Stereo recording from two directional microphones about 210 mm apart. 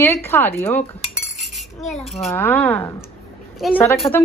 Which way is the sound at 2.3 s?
10° left (ahead or behind).